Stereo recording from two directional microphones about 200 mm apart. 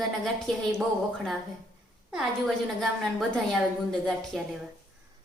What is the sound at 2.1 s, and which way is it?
A woman's voice, centre (ahead or behind).